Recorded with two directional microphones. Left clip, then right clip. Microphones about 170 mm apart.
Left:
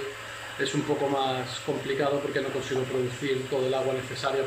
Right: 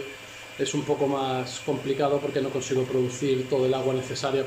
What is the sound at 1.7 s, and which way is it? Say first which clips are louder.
Speech: right 2 dB; 5° right (ahead or behind).